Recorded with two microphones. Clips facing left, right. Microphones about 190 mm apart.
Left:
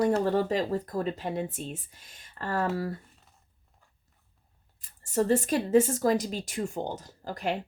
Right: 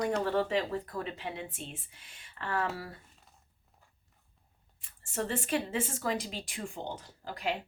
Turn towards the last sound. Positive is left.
turn(degrees=40)  # may be behind; listen again after turning